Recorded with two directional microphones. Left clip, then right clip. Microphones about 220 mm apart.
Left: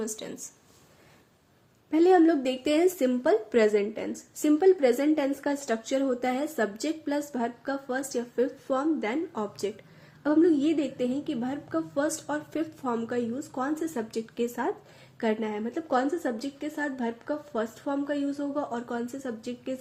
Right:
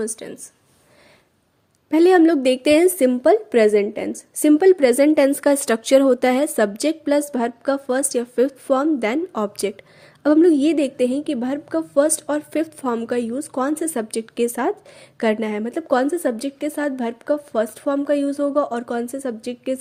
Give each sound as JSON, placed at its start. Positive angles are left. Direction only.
{"t": 0.0, "sound": "speech", "side_deg": -25}
{"t": 1.9, "sound": "a woman's voice", "side_deg": -50}